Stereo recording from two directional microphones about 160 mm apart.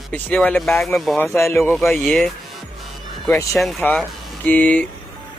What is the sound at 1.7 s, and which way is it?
Speech, centre (ahead or behind).